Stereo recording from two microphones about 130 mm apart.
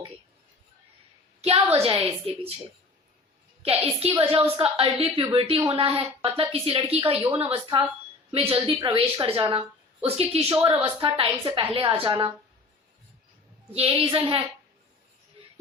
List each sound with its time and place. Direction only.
1.4 s a sound: 55° right (ahead or behind)
1.7 s a woman's voice: 50° right (ahead or behind)
3.6 s a woman's voice: 50° right (ahead or behind)
7.3 s speech: 20° right (ahead or behind)
7.5 s a woman's voice: 40° right (ahead or behind)
10.6 s a woman's voice: 35° right (ahead or behind)
13.7 s a woman's voice: 45° right (ahead or behind)